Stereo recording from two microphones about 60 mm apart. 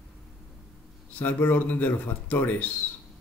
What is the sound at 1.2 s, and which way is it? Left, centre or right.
Speech, left.